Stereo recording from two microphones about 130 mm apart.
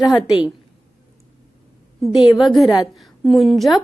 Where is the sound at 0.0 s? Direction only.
5° right (ahead or behind).